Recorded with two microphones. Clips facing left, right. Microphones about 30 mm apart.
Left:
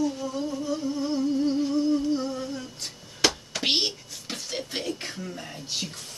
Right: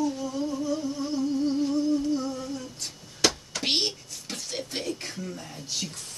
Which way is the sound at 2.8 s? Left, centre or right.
Centre.